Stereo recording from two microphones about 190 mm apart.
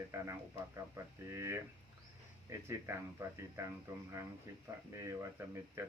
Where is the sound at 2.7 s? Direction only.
15° right (ahead or behind).